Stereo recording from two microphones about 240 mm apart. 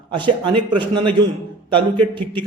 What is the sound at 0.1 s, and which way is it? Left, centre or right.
A man's voice, centre.